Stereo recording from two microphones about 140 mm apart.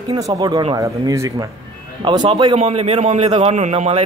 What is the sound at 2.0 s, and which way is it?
Speech, 35° right (ahead or behind).